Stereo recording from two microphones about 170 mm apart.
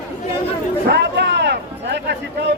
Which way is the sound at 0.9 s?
85° right.